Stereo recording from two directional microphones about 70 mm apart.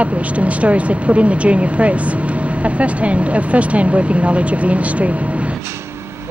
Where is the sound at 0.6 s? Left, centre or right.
Centre.